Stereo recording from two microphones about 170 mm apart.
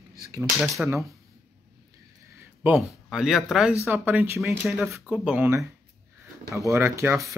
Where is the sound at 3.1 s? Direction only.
5° right (ahead or behind).